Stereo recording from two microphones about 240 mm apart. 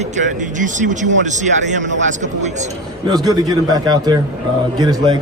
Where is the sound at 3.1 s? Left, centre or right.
Centre.